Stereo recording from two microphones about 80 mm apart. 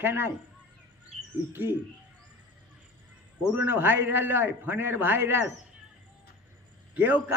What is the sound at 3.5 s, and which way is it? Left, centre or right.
A man's voice, right.